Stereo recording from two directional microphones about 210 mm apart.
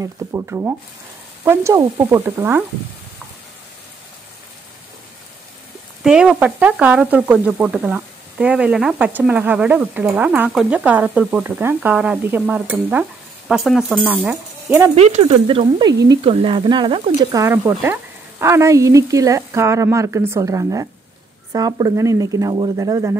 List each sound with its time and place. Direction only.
0.0 s frying: 15° right (ahead or behind)
6.0 s frying: 5° right (ahead or behind)
13.5 s speech: 5° right (ahead or behind)
15.0 s speech: 30° right (ahead or behind); by 17.9 s 10° right (ahead or behind)
18.4 s frying: 15° right (ahead or behind)